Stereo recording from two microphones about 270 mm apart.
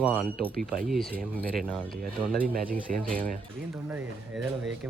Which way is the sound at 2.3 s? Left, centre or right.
Right.